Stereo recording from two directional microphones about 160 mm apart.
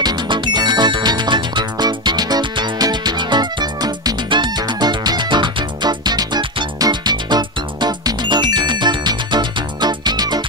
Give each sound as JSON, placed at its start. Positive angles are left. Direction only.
{"t": 0.0, "sound": "music", "side_deg": -30}